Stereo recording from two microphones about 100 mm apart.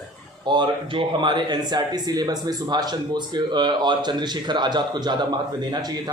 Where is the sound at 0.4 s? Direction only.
50° right (ahead or behind).